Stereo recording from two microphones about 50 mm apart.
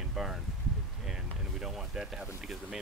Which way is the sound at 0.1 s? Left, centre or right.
Centre.